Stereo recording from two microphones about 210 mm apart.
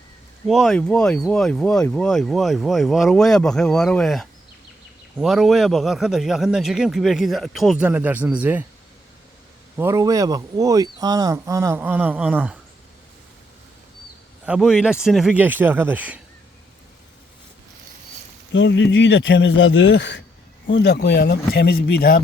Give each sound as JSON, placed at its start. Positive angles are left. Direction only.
{"t": 0.4, "sound": "speech", "side_deg": 0}
{"t": 9.7, "sound": "speech", "side_deg": -15}
{"t": 14.4, "sound": "speech", "side_deg": -5}
{"t": 18.5, "sound": "speech", "side_deg": 60}